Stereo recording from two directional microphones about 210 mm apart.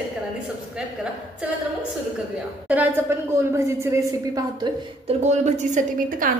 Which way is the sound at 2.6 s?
10° right (ahead or behind).